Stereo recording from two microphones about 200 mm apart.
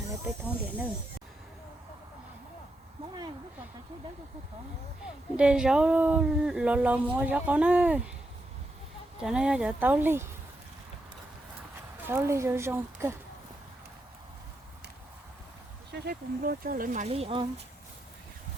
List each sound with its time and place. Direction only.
0.3 s speech: 5° right (ahead or behind)
5.4 s speech: 5° right (ahead or behind)
9.2 s speech: 5° right (ahead or behind)
12.0 s speech: 15° right (ahead or behind)
15.9 s speech: 50° right (ahead or behind); by 17.4 s 30° right (ahead or behind)